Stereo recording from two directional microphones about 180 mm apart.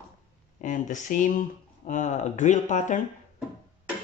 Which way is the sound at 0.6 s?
45° left (ahead or behind).